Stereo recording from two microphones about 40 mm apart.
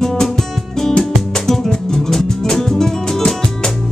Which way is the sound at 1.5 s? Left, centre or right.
Centre.